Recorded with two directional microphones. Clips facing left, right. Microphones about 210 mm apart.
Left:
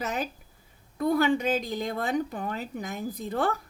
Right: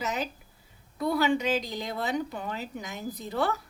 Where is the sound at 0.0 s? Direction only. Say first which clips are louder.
Left 1 dB; 55° left (ahead or behind).